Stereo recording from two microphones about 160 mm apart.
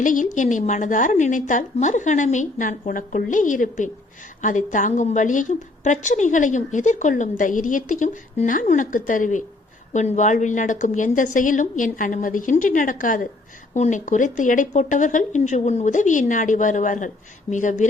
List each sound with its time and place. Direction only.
0.0 s a woman's voice: 55° left (ahead or behind)